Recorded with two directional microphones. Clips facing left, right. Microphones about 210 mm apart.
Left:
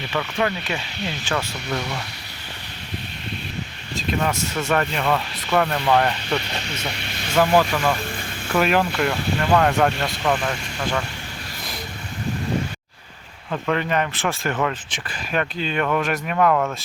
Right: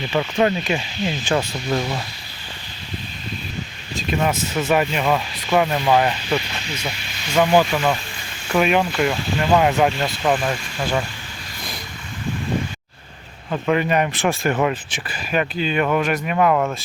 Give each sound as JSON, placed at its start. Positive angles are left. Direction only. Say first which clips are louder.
{"t": 0.1, "sound": "speech", "louder": "right 5 dB", "side_deg": -25}
{"t": 1.3, "sound": "speech", "louder": "right 4 dB", "side_deg": -15}
{"t": 4.2, "sound": "speech", "louder": "right 5 dB", "side_deg": -20}
{"t": 4.7, "sound": "speech", "louder": "right 2 dB", "side_deg": -5}
{"t": 13.5, "sound": "speech", "louder": "right 3 dB", "side_deg": -10}